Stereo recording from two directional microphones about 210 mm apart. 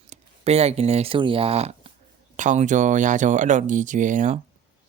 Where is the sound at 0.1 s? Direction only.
30° right (ahead or behind).